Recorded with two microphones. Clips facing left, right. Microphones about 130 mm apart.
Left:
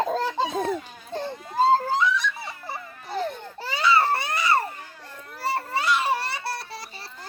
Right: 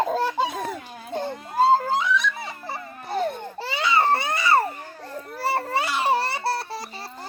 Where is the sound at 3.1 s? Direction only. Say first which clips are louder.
Right 3 dB; 55° right (ahead or behind).